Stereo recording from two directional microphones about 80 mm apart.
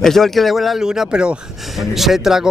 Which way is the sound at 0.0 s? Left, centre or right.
Centre.